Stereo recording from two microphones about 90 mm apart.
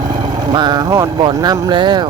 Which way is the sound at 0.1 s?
55° right (ahead or behind).